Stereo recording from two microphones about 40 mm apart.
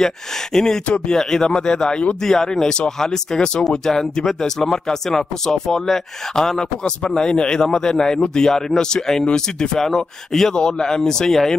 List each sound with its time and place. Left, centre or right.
0.0 s a man's voice: centre